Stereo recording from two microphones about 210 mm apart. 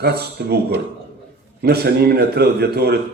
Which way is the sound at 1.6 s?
50° right (ahead or behind).